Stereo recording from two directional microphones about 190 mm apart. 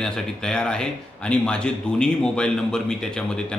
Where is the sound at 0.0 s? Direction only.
5° left (ahead or behind).